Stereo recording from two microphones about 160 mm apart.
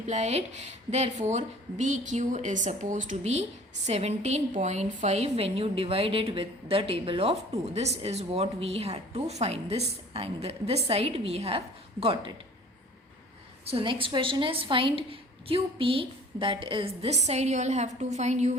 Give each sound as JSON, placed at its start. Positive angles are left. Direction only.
{"t": 0.0, "sound": "a woman's voice", "side_deg": -45}
{"t": 13.7, "sound": "a woman's voice", "side_deg": -35}